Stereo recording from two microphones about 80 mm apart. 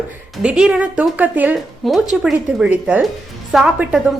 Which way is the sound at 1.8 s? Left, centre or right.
Centre.